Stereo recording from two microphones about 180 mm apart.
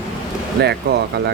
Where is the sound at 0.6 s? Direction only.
65° right (ahead or behind).